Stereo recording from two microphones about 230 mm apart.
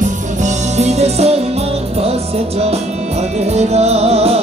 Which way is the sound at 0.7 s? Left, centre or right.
Right.